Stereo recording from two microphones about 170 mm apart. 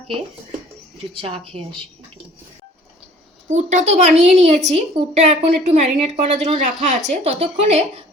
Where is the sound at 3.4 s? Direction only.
45° right (ahead or behind).